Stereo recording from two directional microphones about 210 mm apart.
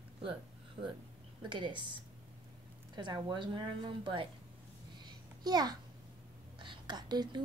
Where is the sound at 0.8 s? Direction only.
25° right (ahead or behind).